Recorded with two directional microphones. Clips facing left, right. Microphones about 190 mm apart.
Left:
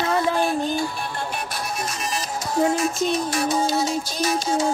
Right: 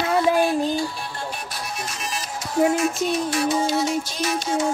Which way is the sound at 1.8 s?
40° left (ahead or behind).